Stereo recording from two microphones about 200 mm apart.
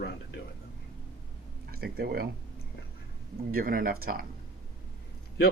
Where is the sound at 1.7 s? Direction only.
50° right (ahead or behind).